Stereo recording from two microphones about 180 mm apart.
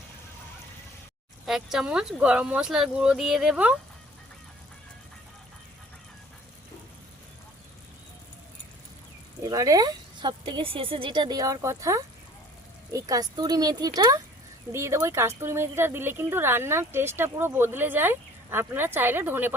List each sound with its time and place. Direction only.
1.5 s speech: 5° right (ahead or behind)
9.4 s speech: 20° right (ahead or behind)